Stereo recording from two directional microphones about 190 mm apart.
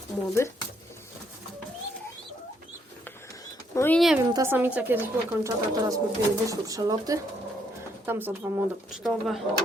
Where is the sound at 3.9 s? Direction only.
Centre (ahead or behind).